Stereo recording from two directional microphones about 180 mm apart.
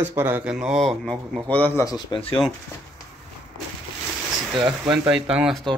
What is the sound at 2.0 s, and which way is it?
Speech, 30° left (ahead or behind).